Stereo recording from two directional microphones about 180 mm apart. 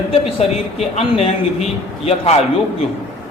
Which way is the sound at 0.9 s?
35° left (ahead or behind).